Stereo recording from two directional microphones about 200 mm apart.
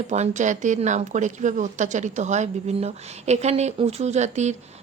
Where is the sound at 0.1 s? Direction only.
35° right (ahead or behind).